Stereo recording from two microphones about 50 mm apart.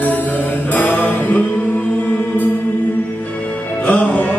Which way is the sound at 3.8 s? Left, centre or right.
Left.